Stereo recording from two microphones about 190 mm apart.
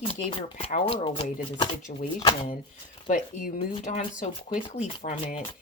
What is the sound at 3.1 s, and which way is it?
Speech, 40° left (ahead or behind).